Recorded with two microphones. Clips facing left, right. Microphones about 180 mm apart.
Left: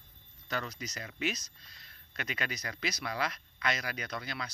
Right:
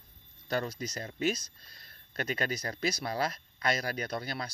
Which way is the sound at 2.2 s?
30° right (ahead or behind).